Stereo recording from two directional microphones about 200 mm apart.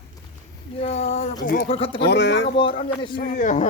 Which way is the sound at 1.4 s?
45° left (ahead or behind).